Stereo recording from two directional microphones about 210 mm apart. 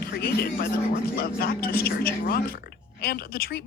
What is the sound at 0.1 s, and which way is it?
Speech, 45° left (ahead or behind).